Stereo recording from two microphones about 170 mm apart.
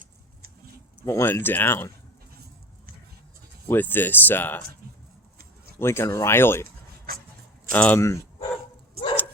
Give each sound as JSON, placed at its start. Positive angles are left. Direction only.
{"t": 1.0, "sound": "speech", "side_deg": 15}
{"t": 3.7, "sound": "speech", "side_deg": 10}
{"t": 5.8, "sound": "speech", "side_deg": 15}
{"t": 6.7, "sound": "a sound", "side_deg": -60}
{"t": 7.7, "sound": "speech", "side_deg": 10}